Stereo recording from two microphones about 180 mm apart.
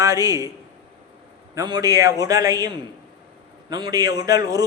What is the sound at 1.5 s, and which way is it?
A man's voice, 20° right (ahead or behind).